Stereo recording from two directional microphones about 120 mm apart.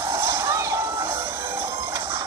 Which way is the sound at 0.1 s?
25° right (ahead or behind).